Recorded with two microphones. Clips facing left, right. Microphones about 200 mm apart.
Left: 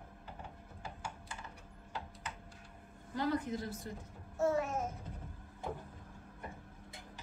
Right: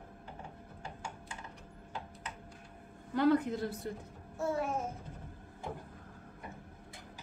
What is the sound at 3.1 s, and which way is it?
Speech, 60° right (ahead or behind).